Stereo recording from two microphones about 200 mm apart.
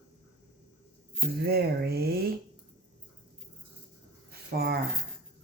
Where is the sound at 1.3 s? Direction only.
50° right (ahead or behind).